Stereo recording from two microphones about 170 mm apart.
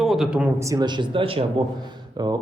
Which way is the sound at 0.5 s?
20° right (ahead or behind).